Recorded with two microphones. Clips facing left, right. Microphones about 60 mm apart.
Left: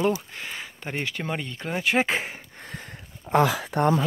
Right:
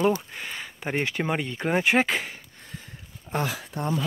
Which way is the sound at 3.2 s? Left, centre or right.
Left.